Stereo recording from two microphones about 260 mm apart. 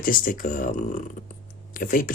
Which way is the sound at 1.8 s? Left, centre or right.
Left.